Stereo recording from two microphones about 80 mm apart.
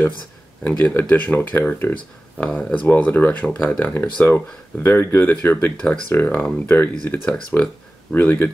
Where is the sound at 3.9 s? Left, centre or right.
Left.